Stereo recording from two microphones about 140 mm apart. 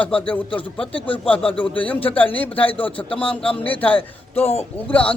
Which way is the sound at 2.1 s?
10° left (ahead or behind).